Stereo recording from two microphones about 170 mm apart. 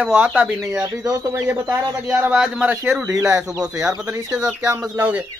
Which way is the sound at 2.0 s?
5° right (ahead or behind).